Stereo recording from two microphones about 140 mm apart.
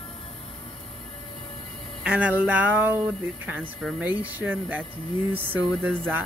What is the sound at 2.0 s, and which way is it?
Speech, 10° right (ahead or behind).